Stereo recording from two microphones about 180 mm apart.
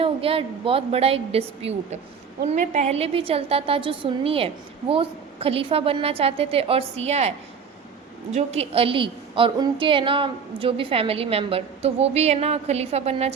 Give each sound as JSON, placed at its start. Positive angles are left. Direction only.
{"t": 0.0, "sound": "a woman's voice", "side_deg": -30}